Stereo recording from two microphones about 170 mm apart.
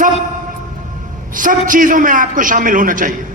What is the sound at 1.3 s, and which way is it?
A man's voice, 50° right (ahead or behind).